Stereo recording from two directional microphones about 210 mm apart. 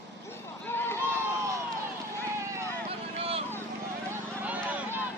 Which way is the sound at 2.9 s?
25° right (ahead or behind).